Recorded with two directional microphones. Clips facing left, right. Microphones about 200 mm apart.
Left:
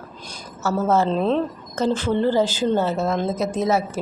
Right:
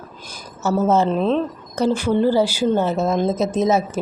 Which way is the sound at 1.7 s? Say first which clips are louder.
Right 3 dB; 15° right (ahead or behind).